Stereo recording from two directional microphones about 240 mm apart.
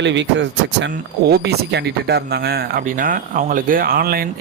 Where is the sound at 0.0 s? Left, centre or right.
Right.